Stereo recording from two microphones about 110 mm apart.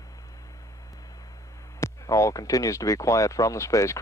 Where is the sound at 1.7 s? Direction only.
30° left (ahead or behind).